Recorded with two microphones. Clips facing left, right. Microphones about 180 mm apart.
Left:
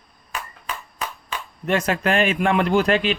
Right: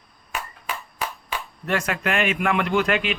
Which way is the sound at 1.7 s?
25° left (ahead or behind).